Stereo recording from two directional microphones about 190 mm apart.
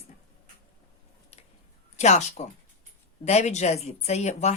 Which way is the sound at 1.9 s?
35° left (ahead or behind).